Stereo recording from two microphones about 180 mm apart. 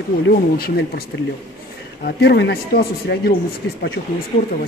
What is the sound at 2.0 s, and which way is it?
Speech, 65° left (ahead or behind).